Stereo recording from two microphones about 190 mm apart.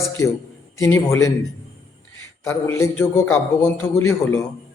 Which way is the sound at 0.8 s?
15° left (ahead or behind).